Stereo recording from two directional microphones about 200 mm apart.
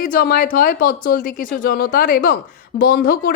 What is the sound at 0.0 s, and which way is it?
Speech, 45° left (ahead or behind).